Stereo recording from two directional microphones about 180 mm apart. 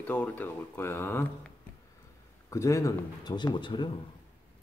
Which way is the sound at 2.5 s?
15° left (ahead or behind).